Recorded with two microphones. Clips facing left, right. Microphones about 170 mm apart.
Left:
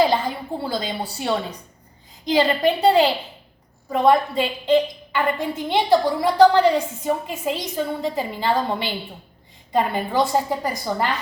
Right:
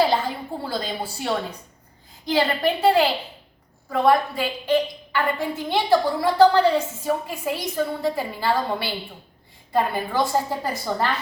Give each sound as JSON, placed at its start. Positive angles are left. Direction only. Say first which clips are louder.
{"t": 0.6, "sound": "a woman's voice", "louder": "left 2 dB", "side_deg": 20}